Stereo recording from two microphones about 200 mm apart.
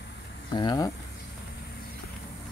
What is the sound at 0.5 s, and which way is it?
Speech, 20° left (ahead or behind).